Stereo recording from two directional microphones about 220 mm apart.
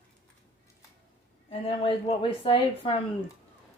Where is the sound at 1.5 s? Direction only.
25° left (ahead or behind).